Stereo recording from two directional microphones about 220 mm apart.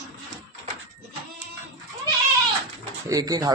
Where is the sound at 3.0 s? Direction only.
15° right (ahead or behind).